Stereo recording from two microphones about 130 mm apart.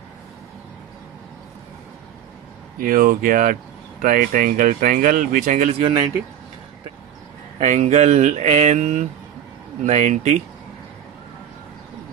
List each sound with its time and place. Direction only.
2.7 s speech: 90° right
7.6 s speech: 65° right (ahead or behind)